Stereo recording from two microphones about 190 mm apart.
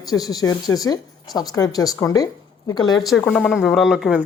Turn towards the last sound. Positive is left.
turn(degrees=0)  # may be behind; listen again after turning